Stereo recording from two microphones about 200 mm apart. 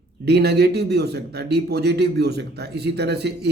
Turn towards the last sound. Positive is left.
turn(degrees=-55)  # may be behind; listen again after turning